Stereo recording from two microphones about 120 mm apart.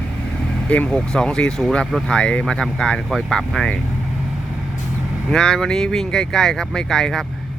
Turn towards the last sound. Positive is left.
turn(degrees=5)  # may be behind; listen again after turning